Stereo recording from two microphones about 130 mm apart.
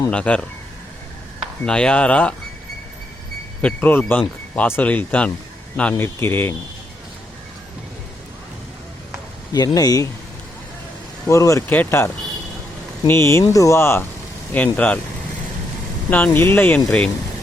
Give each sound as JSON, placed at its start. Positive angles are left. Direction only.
{"t": 0.1, "sound": "speech", "side_deg": 10}
{"t": 1.6, "sound": "speech", "side_deg": 5}
{"t": 3.6, "sound": "speech", "side_deg": 10}
{"t": 9.5, "sound": "speech", "side_deg": 30}
{"t": 11.3, "sound": "speech", "side_deg": 25}
{"t": 16.0, "sound": "speech", "side_deg": 10}